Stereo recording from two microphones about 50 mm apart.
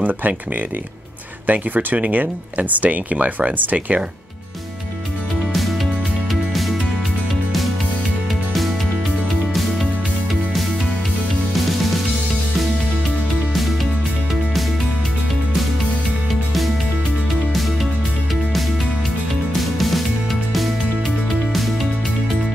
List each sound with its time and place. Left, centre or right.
0.0 s speech: right
1.5 s speech: right
19.5 s music: centre